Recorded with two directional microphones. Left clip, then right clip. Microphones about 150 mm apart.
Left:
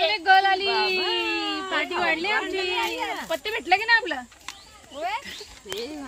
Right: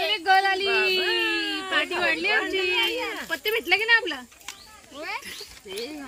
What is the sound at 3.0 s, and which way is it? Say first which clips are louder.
Speech: left 2 dB; 80° left.